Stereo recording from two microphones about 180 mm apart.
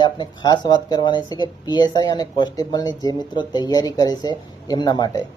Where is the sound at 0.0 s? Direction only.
25° left (ahead or behind).